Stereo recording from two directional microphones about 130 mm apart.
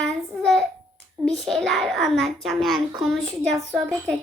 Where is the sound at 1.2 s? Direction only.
Centre (ahead or behind).